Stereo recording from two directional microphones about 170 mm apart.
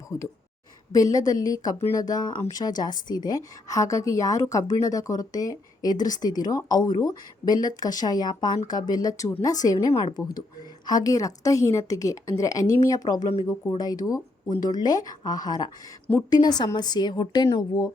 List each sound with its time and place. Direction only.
0.1 s speech: 15° left (ahead or behind)